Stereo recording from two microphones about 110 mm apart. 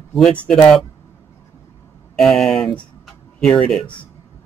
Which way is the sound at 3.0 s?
5° left (ahead or behind).